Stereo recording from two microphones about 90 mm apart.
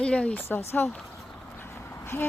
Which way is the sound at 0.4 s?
25° left (ahead or behind).